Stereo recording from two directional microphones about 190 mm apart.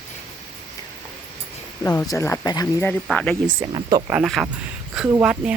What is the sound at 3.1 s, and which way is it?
Speech, 5° left (ahead or behind).